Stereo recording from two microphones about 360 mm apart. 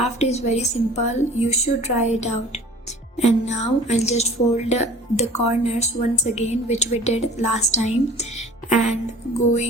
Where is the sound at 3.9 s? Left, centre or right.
Centre.